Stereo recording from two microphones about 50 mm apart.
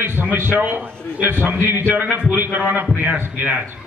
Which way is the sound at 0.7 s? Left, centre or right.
Right.